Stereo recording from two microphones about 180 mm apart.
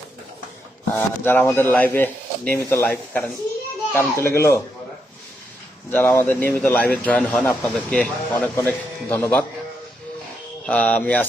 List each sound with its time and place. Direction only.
0.9 s speech: 10° left (ahead or behind)
5.9 s speech: 10° left (ahead or behind)
8.3 s speech: 15° left (ahead or behind)
10.7 s speech: 5° left (ahead or behind)